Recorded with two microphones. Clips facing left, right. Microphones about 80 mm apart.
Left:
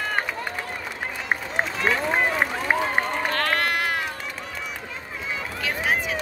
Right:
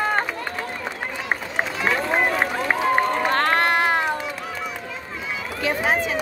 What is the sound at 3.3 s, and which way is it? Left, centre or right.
Run, right.